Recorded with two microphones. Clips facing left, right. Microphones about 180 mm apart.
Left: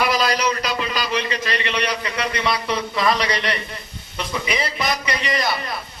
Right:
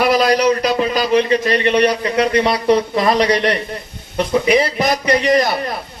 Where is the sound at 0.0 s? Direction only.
55° right (ahead or behind).